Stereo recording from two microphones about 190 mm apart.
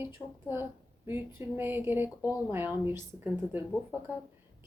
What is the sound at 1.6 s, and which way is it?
A woman's voice, 10° right (ahead or behind).